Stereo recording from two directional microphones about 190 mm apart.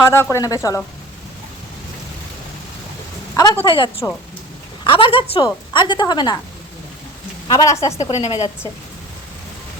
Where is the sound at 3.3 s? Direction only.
15° left (ahead or behind).